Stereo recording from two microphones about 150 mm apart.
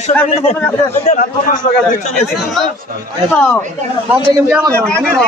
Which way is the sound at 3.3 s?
10° left (ahead or behind).